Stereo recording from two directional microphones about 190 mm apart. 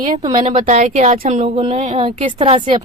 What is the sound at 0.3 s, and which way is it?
Speech, 40° right (ahead or behind).